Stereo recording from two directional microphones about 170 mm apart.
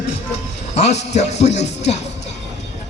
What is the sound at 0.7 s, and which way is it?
Speech, 40° left (ahead or behind).